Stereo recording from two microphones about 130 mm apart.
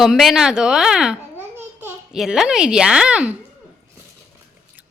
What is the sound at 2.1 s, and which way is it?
A woman's voice, centre (ahead or behind).